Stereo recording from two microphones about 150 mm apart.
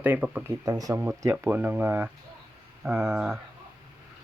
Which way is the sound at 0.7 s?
25° right (ahead or behind).